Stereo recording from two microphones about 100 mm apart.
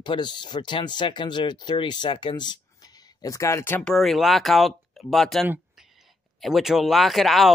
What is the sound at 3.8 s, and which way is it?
Speech, 5° left (ahead or behind).